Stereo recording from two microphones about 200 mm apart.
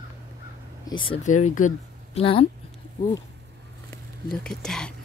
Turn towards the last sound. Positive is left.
turn(degrees=0)  # may be behind; listen again after turning